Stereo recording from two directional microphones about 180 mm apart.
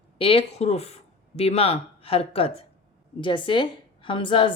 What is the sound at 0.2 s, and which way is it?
A woman's voice, 30° left (ahead or behind).